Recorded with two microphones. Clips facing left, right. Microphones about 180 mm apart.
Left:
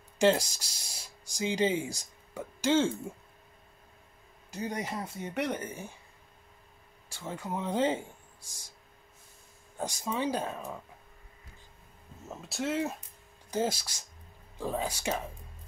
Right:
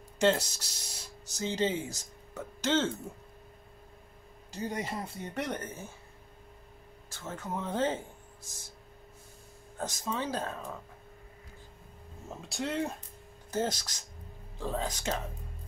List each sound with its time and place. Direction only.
0.2 s speech: 10° left (ahead or behind)
4.7 s speech: 10° left (ahead or behind)
7.1 s speech: 15° left (ahead or behind)
9.8 s speech: 10° left (ahead or behind)
12.3 s speech: centre (ahead or behind)